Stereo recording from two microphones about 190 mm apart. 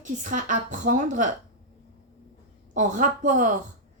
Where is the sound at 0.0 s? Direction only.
45° right (ahead or behind).